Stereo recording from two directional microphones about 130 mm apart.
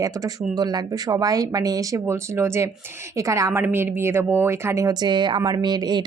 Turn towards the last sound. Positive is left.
turn(degrees=-35)  # may be behind; listen again after turning